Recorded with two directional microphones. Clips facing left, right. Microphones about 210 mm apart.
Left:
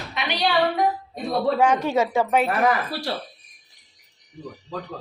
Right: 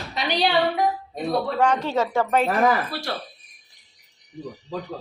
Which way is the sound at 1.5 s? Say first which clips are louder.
Left 2 dB; 10° left (ahead or behind).